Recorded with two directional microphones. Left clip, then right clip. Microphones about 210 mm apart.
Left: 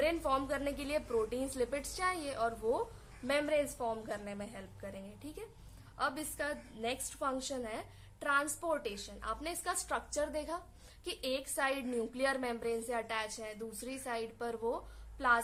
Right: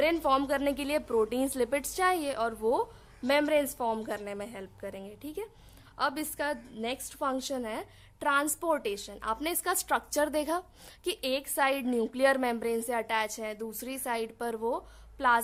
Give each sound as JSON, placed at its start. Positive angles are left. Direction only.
{"t": 0.0, "sound": "a woman's voice", "side_deg": -40}